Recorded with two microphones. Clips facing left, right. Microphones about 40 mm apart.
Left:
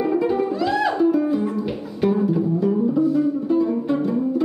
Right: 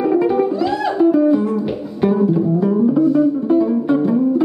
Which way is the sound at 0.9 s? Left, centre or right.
Centre.